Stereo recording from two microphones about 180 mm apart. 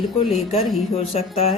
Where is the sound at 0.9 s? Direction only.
35° left (ahead or behind).